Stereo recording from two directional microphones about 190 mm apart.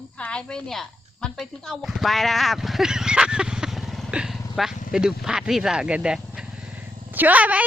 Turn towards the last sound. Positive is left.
turn(degrees=-10)  # may be behind; listen again after turning